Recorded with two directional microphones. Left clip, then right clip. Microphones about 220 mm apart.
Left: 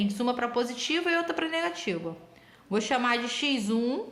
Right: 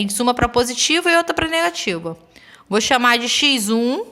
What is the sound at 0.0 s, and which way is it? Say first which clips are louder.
A woman's voice: right 11 dB; 50° right (ahead or behind).